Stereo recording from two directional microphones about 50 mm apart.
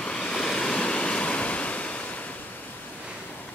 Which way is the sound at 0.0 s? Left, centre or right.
Centre.